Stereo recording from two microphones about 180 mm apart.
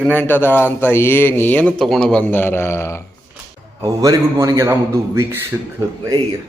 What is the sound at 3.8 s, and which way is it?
A man's voice, 15° right (ahead or behind).